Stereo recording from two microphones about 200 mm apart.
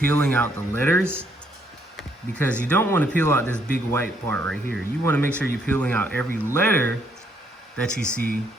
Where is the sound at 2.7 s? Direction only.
10° left (ahead or behind).